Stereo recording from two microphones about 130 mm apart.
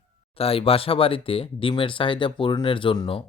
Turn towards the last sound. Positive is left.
turn(degrees=40)  # may be behind; listen again after turning